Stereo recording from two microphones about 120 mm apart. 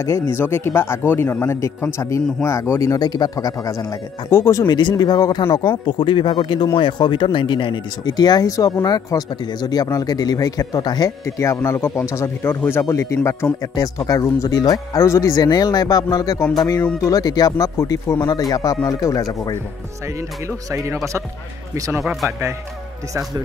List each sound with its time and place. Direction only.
0.0 s speech: 20° left (ahead or behind)
20.4 s speech: 25° right (ahead or behind)
22.0 s speech: centre (ahead or behind)